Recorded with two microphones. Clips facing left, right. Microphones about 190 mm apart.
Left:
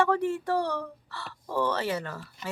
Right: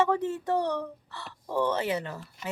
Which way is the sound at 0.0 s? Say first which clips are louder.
Left 1 dB; 20° right (ahead or behind).